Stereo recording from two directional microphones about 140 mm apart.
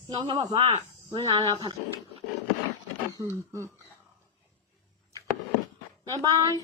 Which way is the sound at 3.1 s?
20° right (ahead or behind).